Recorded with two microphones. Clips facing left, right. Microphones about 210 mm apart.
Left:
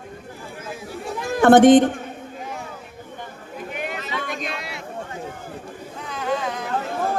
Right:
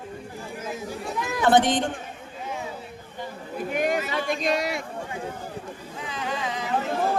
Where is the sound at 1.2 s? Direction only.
50° left (ahead or behind).